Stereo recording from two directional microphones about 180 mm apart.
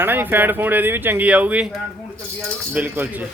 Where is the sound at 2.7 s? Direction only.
10° right (ahead or behind).